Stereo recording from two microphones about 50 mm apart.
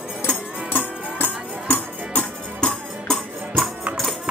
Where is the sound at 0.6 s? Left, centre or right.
Left.